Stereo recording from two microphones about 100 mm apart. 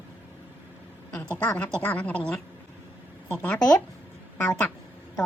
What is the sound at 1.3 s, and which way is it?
A woman's voice, 10° left (ahead or behind).